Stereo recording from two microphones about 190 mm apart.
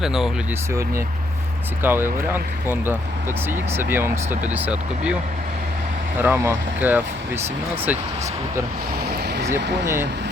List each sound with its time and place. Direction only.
0.0 s speech: centre (ahead or behind)
0.7 s speech: 15° right (ahead or behind)
6.1 s speech: 10° right (ahead or behind)
9.0 s vehicle: 60° right (ahead or behind)
9.8 s speech: 15° right (ahead or behind)